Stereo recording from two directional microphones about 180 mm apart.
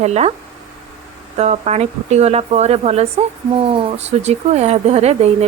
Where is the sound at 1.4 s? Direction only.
40° right (ahead or behind).